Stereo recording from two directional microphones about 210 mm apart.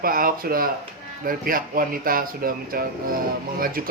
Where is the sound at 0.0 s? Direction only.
45° right (ahead or behind).